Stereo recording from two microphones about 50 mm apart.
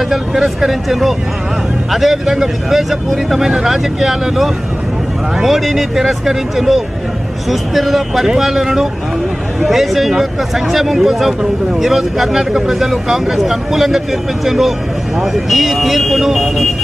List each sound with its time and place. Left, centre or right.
0.1 s speech: centre